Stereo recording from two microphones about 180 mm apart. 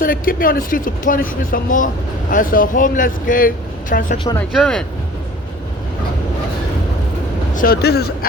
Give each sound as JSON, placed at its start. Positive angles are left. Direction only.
{"t": 0.0, "sound": "speech", "side_deg": 50}
{"t": 4.4, "sound": "speech", "side_deg": 5}
{"t": 7.5, "sound": "speech", "side_deg": 55}